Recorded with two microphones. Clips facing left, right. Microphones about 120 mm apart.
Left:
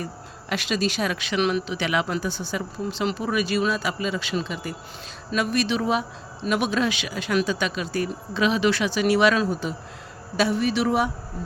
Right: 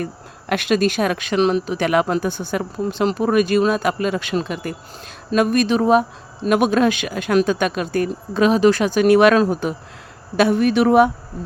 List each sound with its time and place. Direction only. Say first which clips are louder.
0.0 s speech: right 6 dB; 55° right (ahead or behind)
1.4 s speech: right 6 dB; 35° right (ahead or behind); by 11.1 s 55° right (ahead or behind)